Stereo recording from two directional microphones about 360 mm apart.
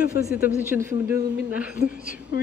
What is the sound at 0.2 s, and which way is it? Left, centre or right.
A woman's voice, centre.